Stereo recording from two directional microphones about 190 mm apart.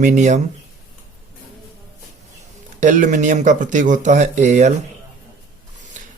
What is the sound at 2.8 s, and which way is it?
Speech, 40° right (ahead or behind).